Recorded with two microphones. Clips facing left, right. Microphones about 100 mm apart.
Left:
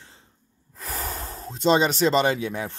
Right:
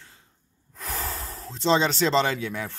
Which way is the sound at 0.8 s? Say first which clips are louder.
Left 1 dB; 15° left (ahead or behind).